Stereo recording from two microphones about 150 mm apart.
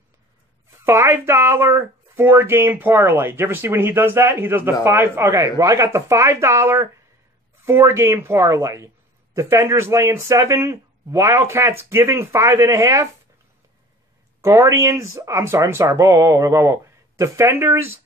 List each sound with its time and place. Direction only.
0.8 s speech: 15° right (ahead or behind)
14.4 s speech: 20° right (ahead or behind)